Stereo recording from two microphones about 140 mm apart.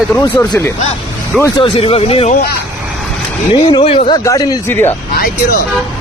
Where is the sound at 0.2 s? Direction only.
25° left (ahead or behind).